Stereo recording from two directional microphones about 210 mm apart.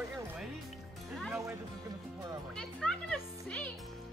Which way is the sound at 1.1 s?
Centre (ahead or behind).